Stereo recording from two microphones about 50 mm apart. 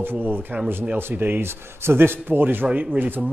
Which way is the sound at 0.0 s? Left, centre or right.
Right.